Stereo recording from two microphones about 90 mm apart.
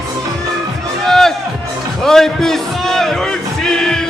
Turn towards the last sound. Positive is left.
turn(degrees=5)  # may be behind; listen again after turning